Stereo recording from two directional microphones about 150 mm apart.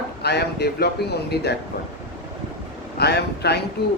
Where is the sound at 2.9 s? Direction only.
90° left.